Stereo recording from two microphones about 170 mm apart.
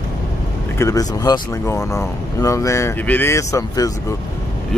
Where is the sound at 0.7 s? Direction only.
20° left (ahead or behind).